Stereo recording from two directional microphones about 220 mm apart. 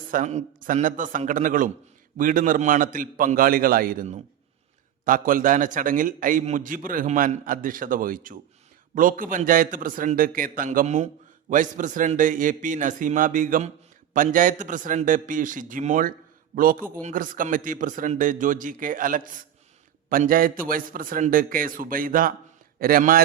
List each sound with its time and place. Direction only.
0.1 s a man's voice: 35° right (ahead or behind)